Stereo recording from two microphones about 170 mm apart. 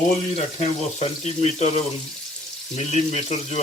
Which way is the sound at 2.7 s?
40° left (ahead or behind).